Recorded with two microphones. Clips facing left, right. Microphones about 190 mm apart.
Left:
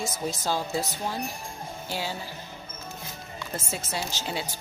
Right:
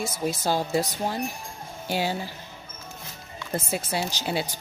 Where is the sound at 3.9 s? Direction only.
10° right (ahead or behind).